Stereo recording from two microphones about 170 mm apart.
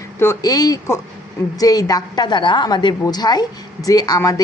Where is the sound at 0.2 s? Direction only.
20° left (ahead or behind).